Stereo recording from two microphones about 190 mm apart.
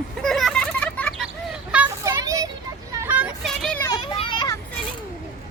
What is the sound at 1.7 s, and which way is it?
Children playing, 10° right (ahead or behind).